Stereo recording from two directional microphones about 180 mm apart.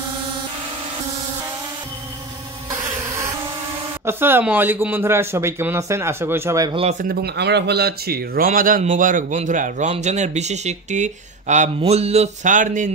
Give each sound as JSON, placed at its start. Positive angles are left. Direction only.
{"t": 2.7, "sound": "insect", "side_deg": -15}
{"t": 4.0, "sound": "a man's voice", "side_deg": -10}
{"t": 6.7, "sound": "speech", "side_deg": -30}
{"t": 7.0, "sound": "speech", "side_deg": -60}